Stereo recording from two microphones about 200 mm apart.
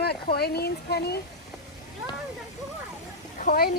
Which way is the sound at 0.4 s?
50° left (ahead or behind).